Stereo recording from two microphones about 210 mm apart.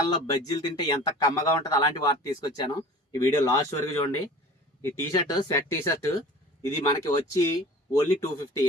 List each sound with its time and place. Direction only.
0.1 s speech: 20° left (ahead or behind)